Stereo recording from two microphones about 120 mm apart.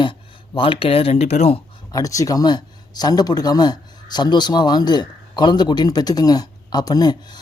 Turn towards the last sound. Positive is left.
turn(degrees=35)  # may be behind; listen again after turning